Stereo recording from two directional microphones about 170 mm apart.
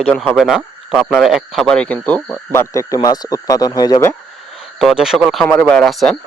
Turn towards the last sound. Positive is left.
turn(degrees=0)  # may be behind; listen again after turning